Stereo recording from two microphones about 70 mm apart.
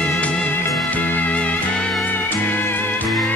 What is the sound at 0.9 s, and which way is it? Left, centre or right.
Music, centre.